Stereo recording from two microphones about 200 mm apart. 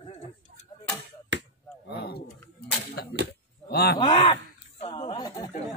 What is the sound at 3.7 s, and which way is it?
Speech, 55° left (ahead or behind).